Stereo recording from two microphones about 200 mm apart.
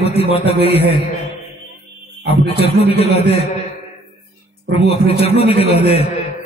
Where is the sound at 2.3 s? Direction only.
30° left (ahead or behind).